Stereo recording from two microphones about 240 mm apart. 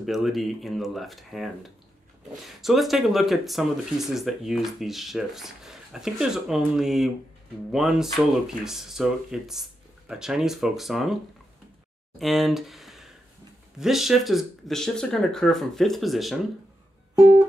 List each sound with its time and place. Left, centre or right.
0.0 s speech: centre
12.2 s speech: centre